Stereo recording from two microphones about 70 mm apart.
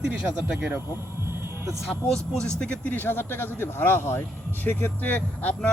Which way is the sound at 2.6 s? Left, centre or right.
Centre.